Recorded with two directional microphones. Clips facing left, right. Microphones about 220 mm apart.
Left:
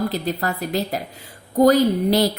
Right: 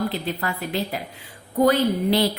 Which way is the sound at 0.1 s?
40° left (ahead or behind).